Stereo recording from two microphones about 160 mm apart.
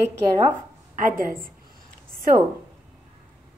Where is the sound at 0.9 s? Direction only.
55° right (ahead or behind).